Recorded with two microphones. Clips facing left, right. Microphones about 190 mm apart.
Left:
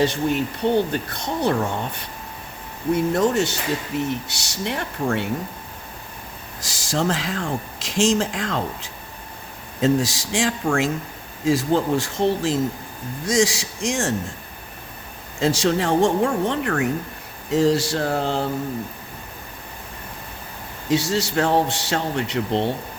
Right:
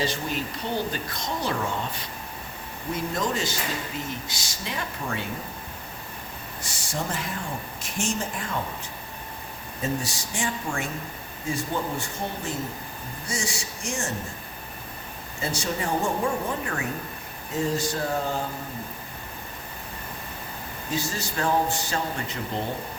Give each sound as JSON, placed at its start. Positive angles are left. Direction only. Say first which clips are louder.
{"t": 0.0, "sound": "speech", "louder": "left 8 dB", "side_deg": 60}
{"t": 2.9, "sound": "speech", "louder": "left 9 dB", "side_deg": 65}
{"t": 6.6, "sound": "speech", "louder": "left 8 dB", "side_deg": 90}
{"t": 15.4, "sound": "a man's voice", "louder": "left 9 dB", "side_deg": 90}
{"t": 20.9, "sound": "a man's voice", "louder": "left 10 dB", "side_deg": 80}